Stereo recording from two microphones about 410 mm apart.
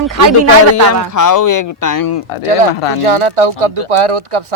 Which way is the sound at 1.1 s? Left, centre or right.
Left.